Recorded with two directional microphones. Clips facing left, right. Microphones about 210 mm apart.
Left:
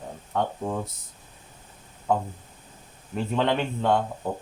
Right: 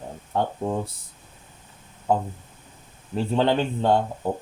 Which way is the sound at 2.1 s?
35° right (ahead or behind).